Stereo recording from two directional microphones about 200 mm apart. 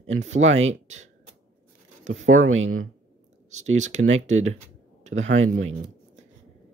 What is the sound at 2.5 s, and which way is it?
Speech, 85° right.